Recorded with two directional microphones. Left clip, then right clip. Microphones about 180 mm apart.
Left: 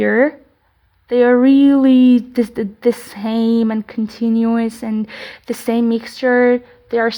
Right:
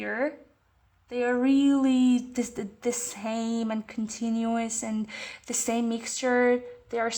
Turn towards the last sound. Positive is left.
turn(degrees=25)  # may be behind; listen again after turning